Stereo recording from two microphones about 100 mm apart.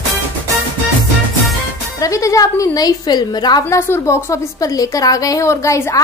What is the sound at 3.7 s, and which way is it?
A woman's voice, 25° left (ahead or behind).